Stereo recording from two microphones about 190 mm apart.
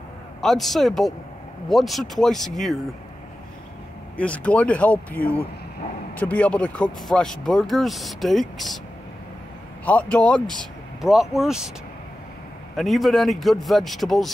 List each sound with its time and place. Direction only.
0.4 s speech: centre (ahead or behind)
4.2 s speech: 5° left (ahead or behind)
10.1 s speech: 5° left (ahead or behind)
12.7 s speech: centre (ahead or behind)